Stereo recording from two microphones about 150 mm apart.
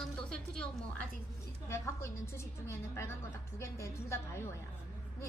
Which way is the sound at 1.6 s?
20° left (ahead or behind).